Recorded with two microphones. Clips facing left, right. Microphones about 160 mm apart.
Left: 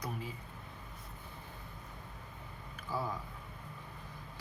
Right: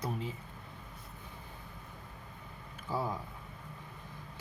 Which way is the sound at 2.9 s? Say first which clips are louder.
Right 3 dB; 25° right (ahead or behind).